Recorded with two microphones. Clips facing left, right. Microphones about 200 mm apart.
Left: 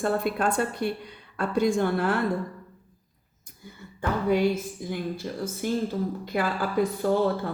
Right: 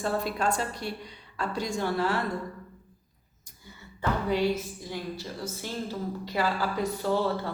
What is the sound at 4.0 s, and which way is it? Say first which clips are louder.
Music: left 3 dB; 50° left (ahead or behind).